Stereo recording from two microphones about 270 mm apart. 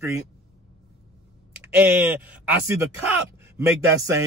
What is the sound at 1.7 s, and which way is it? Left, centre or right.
Speech, centre.